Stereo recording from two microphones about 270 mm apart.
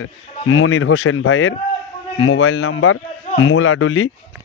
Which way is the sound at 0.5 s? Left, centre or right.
Left.